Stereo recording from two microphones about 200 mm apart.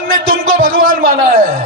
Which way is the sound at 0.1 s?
45° right (ahead or behind).